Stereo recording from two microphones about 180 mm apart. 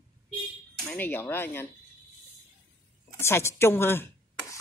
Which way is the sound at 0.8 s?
10° left (ahead or behind).